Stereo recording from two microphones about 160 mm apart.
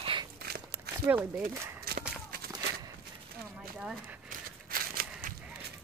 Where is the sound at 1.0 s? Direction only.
15° right (ahead or behind).